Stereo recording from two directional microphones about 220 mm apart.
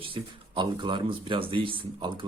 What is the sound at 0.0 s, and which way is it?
Speech, 25° right (ahead or behind).